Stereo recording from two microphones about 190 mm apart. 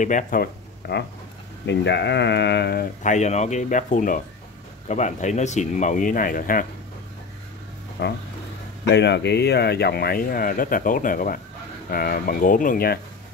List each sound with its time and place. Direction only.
0.0 s speech: 45° left (ahead or behind)
8.0 s speech: 65° left (ahead or behind)